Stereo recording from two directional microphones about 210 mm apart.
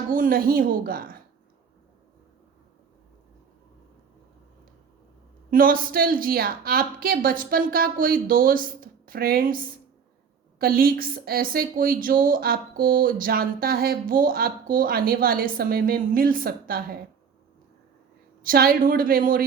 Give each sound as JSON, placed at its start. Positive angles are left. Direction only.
{"t": 0.1, "sound": "a woman's voice", "side_deg": -40}
{"t": 5.5, "sound": "a woman's voice", "side_deg": -40}
{"t": 18.4, "sound": "a woman's voice", "side_deg": -45}